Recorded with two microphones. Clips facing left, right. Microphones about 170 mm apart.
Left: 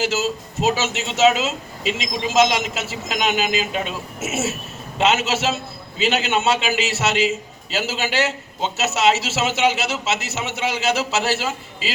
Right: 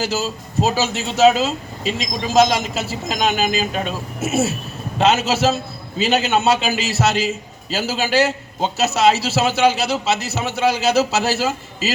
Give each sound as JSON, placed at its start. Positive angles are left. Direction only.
{"t": 0.0, "sound": "a man's voice", "side_deg": -35}